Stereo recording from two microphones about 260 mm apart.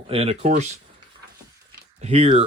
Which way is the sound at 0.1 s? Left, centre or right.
Right.